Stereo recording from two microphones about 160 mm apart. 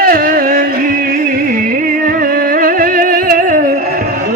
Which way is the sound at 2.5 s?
60° right (ahead or behind).